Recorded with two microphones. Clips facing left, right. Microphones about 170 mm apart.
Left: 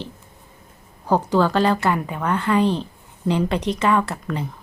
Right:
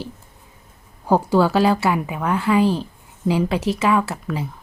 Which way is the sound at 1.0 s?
10° right (ahead or behind).